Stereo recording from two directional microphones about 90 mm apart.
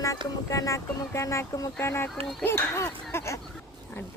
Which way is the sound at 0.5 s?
35° left (ahead or behind).